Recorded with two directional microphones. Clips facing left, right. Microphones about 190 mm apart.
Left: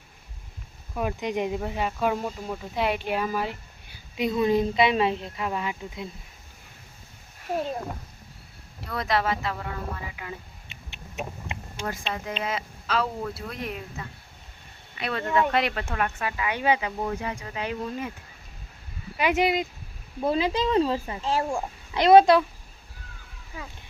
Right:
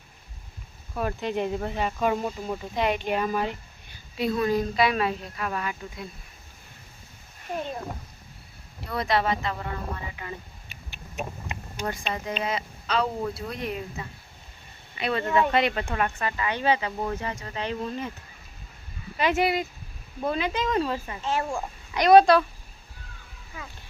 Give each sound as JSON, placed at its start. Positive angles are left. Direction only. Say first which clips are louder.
{"t": 0.9, "sound": "speech", "louder": "even", "side_deg": 10}
{"t": 4.2, "sound": "speech", "louder": "left 2 dB", "side_deg": 20}
{"t": 7.5, "sound": "speech", "louder": "left 4 dB", "side_deg": 5}
{"t": 8.8, "sound": "speech", "louder": "right 1 dB", "side_deg": 0}
{"t": 10.7, "sound": "a sound", "louder": "left 1 dB", "side_deg": 25}
{"t": 11.9, "sound": "speech", "louder": "right 1 dB", "side_deg": 0}
{"t": 19.1, "sound": "speech", "louder": "left 1 dB", "side_deg": 15}
{"t": 20.2, "sound": "speech", "louder": "left 3 dB", "side_deg": 30}